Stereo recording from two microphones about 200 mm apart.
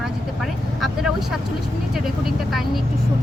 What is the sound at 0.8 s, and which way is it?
Speech, centre (ahead or behind).